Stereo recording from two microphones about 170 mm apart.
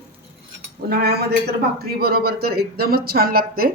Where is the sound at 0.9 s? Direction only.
70° right (ahead or behind).